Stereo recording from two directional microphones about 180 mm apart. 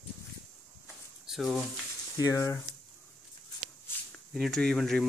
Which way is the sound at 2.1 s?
20° left (ahead or behind).